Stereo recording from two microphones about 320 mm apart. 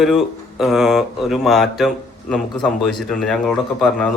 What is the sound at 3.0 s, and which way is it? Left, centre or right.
Speech, centre.